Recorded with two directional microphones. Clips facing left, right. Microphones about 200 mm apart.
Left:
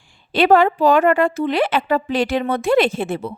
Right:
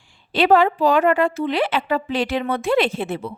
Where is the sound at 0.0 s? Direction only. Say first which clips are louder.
Left 2 dB; 50° left (ahead or behind).